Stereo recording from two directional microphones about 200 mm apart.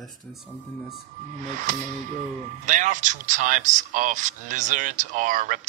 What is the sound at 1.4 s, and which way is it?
Speech, 40° right (ahead or behind).